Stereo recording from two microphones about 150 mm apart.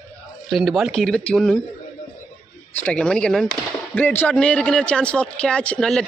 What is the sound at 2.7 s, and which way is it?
Speech, 5° left (ahead or behind).